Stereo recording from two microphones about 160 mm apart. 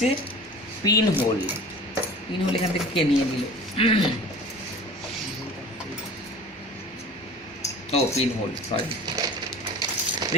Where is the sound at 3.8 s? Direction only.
35° left (ahead or behind).